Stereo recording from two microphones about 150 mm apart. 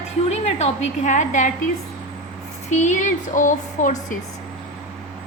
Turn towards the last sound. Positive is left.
turn(degrees=60)  # may be behind; listen again after turning